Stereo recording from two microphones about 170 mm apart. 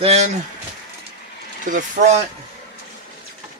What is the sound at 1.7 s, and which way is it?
Speech, 50° right (ahead or behind).